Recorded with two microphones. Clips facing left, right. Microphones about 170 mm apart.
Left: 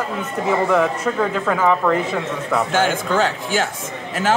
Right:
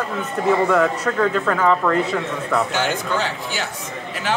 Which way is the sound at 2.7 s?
50° left (ahead or behind).